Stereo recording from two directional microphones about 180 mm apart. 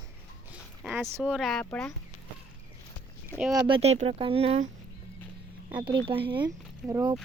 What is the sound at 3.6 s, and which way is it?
Speech, 30° right (ahead or behind).